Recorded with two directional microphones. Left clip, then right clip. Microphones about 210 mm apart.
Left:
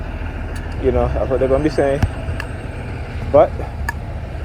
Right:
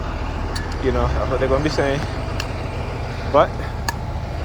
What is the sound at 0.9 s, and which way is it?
Speech, 45° left (ahead or behind).